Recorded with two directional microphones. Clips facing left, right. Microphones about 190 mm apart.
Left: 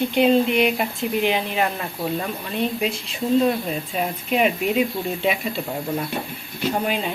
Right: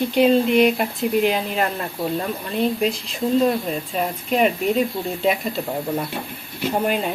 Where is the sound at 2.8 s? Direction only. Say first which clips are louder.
Right 3 dB; centre (ahead or behind).